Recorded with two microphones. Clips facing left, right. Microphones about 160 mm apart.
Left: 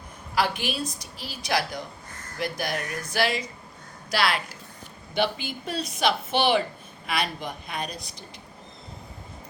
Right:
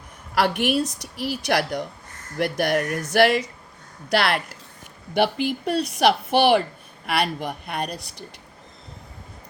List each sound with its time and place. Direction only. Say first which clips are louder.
0.3 s a woman's voice: right 6 dB; 65° right (ahead or behind)